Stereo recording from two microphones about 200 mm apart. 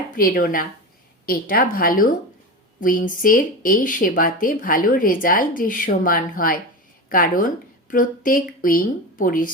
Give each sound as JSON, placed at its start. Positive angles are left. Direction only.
{"t": 0.2, "sound": "speech", "side_deg": 45}